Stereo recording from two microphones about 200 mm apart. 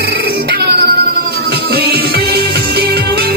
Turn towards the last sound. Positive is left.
turn(degrees=-50)  # may be behind; listen again after turning